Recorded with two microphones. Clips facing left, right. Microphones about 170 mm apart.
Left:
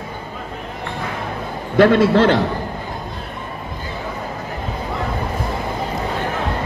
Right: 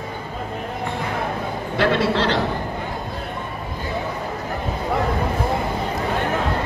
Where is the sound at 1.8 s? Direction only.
50° left (ahead or behind).